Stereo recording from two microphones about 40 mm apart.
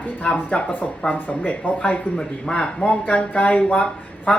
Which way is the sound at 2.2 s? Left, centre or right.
Left.